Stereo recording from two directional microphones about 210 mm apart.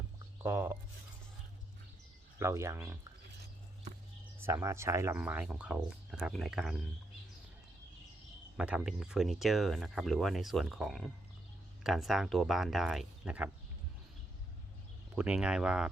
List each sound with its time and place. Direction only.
0.4 s speech: 10° right (ahead or behind)
2.4 s speech: 15° right (ahead or behind)
4.4 s speech: 15° right (ahead or behind)
8.5 s speech: 5° right (ahead or behind)
15.1 s speech: 5° right (ahead or behind)